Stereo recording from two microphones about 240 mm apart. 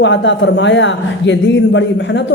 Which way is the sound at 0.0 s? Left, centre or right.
Left.